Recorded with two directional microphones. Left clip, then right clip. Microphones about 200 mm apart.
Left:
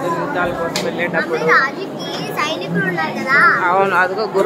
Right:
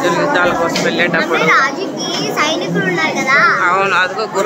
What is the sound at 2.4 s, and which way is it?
Children playing, 25° left (ahead or behind).